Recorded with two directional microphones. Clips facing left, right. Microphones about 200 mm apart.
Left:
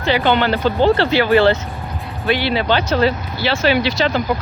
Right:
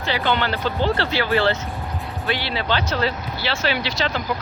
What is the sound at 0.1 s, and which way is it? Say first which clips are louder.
Speech: left 7 dB; 20° left (ahead or behind).